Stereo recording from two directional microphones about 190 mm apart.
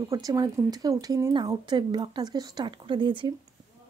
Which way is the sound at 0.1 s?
20° right (ahead or behind).